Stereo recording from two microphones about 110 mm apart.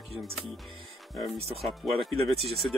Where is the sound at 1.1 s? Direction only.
Centre (ahead or behind).